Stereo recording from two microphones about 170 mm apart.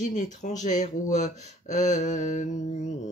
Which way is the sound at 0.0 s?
45° left (ahead or behind).